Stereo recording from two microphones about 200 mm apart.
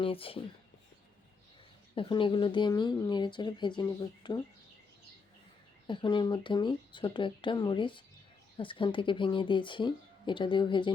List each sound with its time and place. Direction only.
0.0 s speech: 25° left (ahead or behind)
2.0 s speech: 25° left (ahead or behind)
5.9 s speech: 25° left (ahead or behind)